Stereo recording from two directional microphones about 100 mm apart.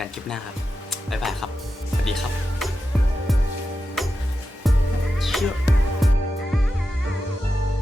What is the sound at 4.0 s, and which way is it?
Music, centre (ahead or behind).